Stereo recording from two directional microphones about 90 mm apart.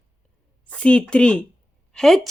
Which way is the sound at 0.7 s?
10° left (ahead or behind).